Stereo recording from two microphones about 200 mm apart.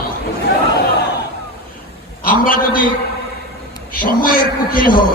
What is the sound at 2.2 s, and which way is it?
Speech, 45° left (ahead or behind).